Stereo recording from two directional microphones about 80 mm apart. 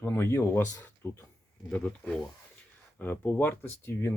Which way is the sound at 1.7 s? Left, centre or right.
Centre.